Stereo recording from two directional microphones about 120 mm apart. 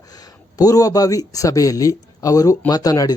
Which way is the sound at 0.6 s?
30° left (ahead or behind).